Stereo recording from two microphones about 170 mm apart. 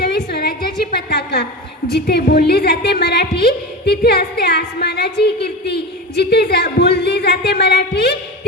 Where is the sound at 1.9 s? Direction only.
70° left (ahead or behind).